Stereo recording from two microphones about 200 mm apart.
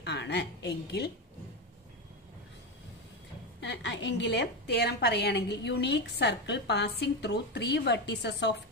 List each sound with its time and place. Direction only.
0.0 s a woman's voice: 60° left (ahead or behind)
3.6 s a woman's voice: 60° left (ahead or behind)